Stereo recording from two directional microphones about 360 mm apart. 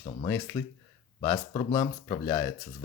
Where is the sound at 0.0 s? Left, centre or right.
Centre.